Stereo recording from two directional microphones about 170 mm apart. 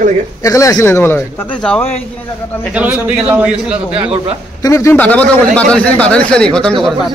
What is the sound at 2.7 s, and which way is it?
A man's voice, 10° right (ahead or behind).